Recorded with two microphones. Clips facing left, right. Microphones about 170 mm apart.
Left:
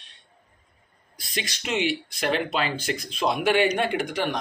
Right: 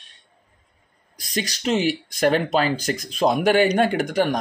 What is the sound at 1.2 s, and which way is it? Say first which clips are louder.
Speech: right 7 dB; 40° right (ahead or behind).